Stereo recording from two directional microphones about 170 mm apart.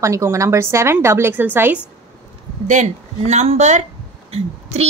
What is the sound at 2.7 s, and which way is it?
Speech, 45° right (ahead or behind).